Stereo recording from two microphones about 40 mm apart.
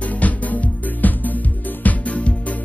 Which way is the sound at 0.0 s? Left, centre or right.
Left.